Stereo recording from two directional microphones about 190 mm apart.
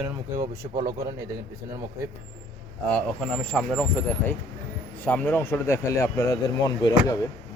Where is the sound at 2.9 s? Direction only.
5° left (ahead or behind).